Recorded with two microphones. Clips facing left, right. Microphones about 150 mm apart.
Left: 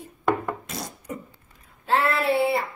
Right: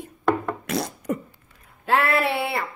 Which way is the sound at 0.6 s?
70° right (ahead or behind).